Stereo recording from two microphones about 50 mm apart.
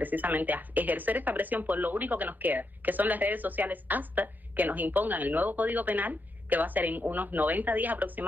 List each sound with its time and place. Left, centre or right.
0.0 s speech: right